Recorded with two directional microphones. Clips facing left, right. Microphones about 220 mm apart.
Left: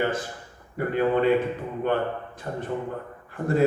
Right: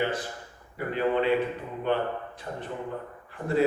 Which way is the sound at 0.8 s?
50° left (ahead or behind).